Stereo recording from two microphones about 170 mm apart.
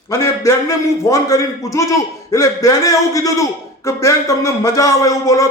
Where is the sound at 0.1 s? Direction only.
20° left (ahead or behind).